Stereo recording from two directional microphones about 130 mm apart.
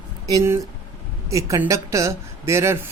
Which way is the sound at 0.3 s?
25° right (ahead or behind).